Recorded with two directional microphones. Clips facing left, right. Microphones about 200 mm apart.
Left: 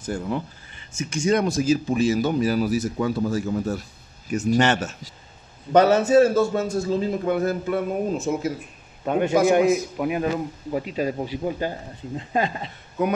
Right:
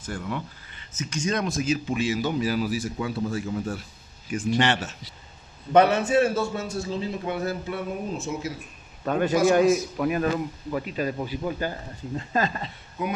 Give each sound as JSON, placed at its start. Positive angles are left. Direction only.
{"t": 0.0, "sound": "a man's voice", "side_deg": 30}
{"t": 9.0, "sound": "a man's voice", "side_deg": 15}
{"t": 10.7, "sound": "a man's voice", "side_deg": 25}